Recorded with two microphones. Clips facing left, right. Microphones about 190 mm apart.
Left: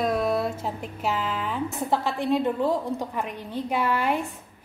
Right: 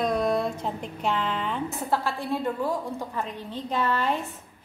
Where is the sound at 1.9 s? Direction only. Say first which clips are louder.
Left 4 dB; 20° left (ahead or behind).